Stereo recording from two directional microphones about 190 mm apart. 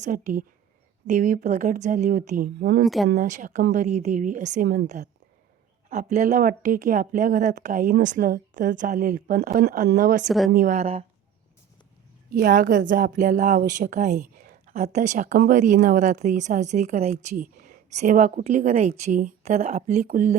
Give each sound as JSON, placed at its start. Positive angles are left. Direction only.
{"t": 0.0, "sound": "speech", "side_deg": -40}
{"t": 2.6, "sound": "speech", "side_deg": -60}
{"t": 2.8, "sound": "speech", "side_deg": 0}
{"t": 3.2, "sound": "speech", "side_deg": -40}
{"t": 5.9, "sound": "a woman's voice", "side_deg": -40}
{"t": 10.2, "sound": "speech", "side_deg": 0}
{"t": 10.5, "sound": "speech", "side_deg": -40}
{"t": 12.3, "sound": "a woman's voice", "side_deg": -45}